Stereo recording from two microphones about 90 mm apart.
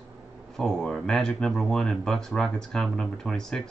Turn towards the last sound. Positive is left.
turn(degrees=5)  # may be behind; listen again after turning